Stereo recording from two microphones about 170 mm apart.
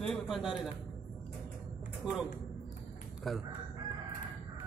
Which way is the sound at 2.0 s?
Centre (ahead or behind).